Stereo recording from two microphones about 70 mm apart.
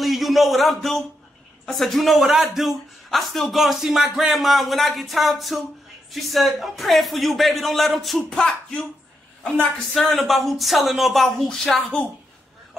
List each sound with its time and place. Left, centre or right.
0.0 s a man's voice: centre